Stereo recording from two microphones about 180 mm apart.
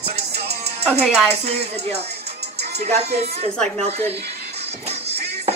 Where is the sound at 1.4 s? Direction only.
35° right (ahead or behind).